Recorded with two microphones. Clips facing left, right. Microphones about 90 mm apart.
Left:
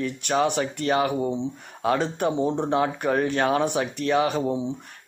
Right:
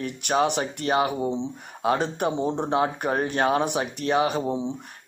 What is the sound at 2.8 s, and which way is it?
Speech, 30° right (ahead or behind).